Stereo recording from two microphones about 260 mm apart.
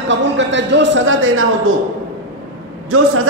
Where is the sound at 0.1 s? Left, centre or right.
Right.